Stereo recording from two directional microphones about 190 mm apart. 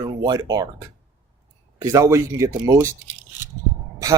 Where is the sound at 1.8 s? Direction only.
15° right (ahead or behind).